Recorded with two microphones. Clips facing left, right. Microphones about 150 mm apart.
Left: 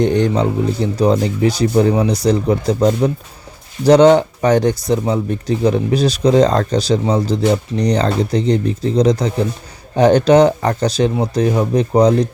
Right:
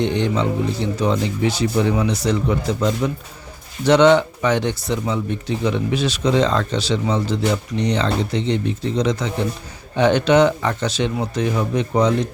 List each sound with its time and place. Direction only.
0.0 s speech: 45° left (ahead or behind)